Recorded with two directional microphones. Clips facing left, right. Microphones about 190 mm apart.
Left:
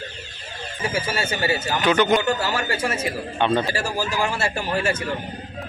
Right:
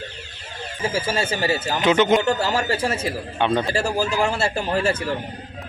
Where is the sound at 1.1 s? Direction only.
30° right (ahead or behind).